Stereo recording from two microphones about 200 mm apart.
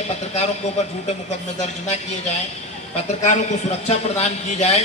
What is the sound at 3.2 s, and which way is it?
A man's voice, 35° left (ahead or behind).